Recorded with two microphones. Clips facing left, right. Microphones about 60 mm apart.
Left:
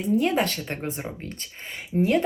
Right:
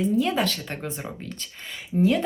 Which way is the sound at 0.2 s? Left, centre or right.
Left.